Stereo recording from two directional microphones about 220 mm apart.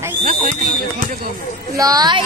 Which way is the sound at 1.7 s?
15° right (ahead or behind).